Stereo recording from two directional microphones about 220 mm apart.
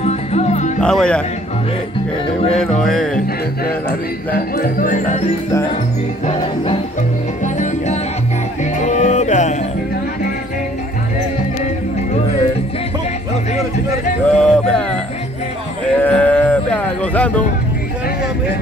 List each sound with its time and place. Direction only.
0.0 s music: 30° left (ahead or behind)
0.7 s music: 5° left (ahead or behind)
2.5 s music: 5° left (ahead or behind)
4.3 s speech: 40° left (ahead or behind)
6.2 s music: 30° left (ahead or behind)
14.2 s speech: 5° left (ahead or behind)
16.0 s a sound: 5° left (ahead or behind)